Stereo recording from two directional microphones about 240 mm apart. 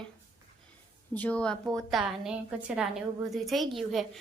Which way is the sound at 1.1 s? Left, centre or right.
Centre.